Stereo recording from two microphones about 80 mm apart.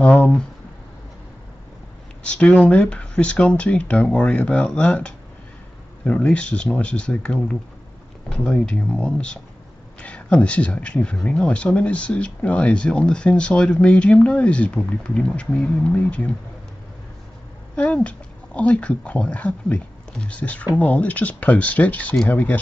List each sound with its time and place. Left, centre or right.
0.0 s speech: centre
2.2 s speech: centre
17.7 s speech: centre